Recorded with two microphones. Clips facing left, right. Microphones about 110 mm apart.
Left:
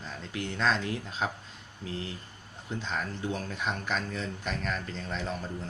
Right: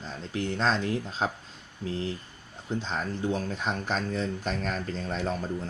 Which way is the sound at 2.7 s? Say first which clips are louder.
Right 3 dB; 30° right (ahead or behind).